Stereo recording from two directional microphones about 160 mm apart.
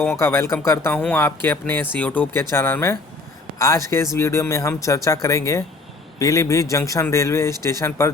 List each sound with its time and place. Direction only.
0.0 s speech: 15° left (ahead or behind)